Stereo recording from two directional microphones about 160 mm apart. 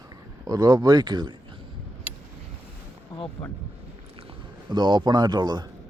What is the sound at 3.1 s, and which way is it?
Music, 25° left (ahead or behind).